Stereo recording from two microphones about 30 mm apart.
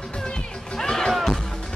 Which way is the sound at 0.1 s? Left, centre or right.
Left.